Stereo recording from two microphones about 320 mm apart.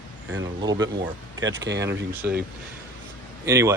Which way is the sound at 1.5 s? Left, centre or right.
Right.